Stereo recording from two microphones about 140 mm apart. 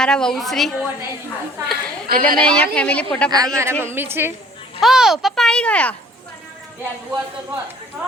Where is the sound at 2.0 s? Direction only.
90° right.